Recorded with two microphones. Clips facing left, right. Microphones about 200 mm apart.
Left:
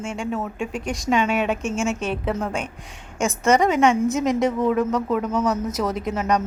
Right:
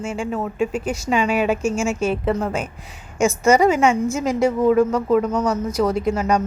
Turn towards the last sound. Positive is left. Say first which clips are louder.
# right 3 dB
turn(degrees=0)  # may be behind; listen again after turning